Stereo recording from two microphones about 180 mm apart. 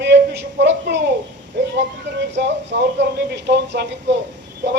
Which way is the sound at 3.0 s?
75° right (ahead or behind).